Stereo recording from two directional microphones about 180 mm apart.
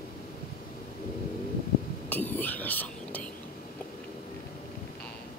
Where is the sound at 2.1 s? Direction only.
10° left (ahead or behind).